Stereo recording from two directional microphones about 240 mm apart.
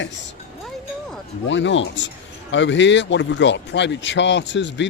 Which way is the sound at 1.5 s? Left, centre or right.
Left.